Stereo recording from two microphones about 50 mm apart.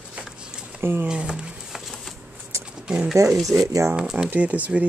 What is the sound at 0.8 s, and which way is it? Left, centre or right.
Speech, right.